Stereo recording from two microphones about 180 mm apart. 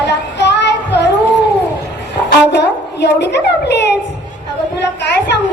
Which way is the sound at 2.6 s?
70° left (ahead or behind).